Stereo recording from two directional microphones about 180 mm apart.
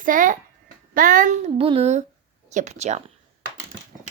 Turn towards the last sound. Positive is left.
turn(degrees=-40)  # may be behind; listen again after turning